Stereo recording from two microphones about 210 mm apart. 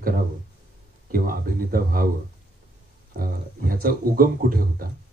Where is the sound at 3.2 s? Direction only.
45° right (ahead or behind).